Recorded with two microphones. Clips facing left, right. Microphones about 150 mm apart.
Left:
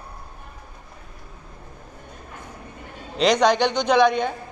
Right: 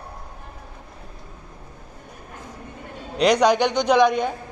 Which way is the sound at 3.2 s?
10° right (ahead or behind).